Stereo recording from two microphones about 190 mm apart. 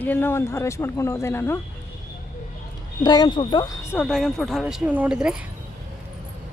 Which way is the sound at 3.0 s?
20° left (ahead or behind).